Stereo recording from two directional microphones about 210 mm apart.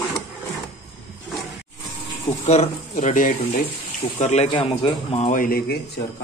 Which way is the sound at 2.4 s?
35° left (ahead or behind).